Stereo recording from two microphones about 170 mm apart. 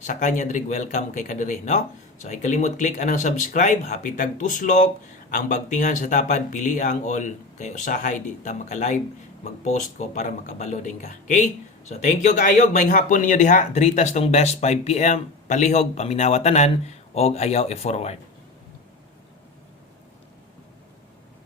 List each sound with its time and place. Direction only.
0.0 s speech: 45° left (ahead or behind)